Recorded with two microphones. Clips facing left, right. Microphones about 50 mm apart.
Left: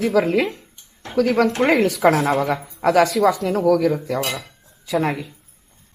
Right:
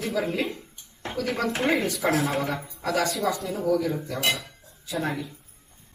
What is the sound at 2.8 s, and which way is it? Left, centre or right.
Speech, left.